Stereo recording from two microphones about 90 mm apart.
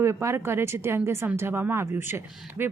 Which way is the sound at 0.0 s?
30° right (ahead or behind).